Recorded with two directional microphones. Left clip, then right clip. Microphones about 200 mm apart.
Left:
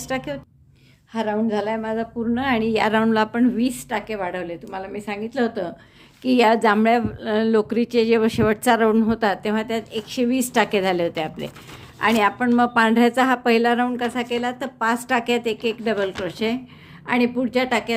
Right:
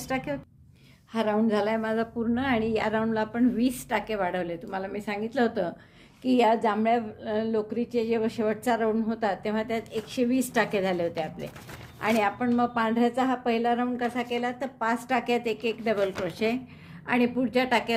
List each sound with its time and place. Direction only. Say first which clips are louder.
0.0 s a woman's voice: left 4 dB; 15° left (ahead or behind)
1.1 s a woman's voice: left 3 dB; centre (ahead or behind)
2.3 s a woman's voice: left 6 dB; 10° left (ahead or behind)
3.6 s a woman's voice: left 3 dB; 5° left (ahead or behind)
6.2 s a woman's voice: left 6 dB; 25° left (ahead or behind)